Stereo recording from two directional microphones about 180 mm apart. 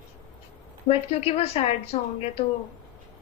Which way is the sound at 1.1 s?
35° left (ahead or behind).